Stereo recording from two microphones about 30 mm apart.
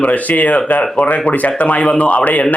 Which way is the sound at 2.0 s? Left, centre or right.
Left.